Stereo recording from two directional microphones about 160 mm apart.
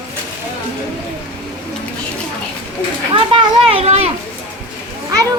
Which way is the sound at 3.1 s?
35° right (ahead or behind).